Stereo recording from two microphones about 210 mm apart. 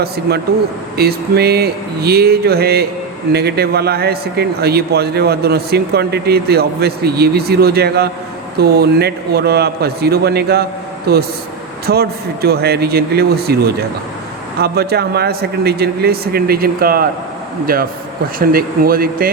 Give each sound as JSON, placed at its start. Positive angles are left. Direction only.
{"t": 0.9, "sound": "a man's voice", "side_deg": -50}